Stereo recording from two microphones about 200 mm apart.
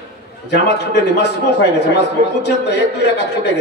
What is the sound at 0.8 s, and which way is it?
A man's voice, 60° left (ahead or behind).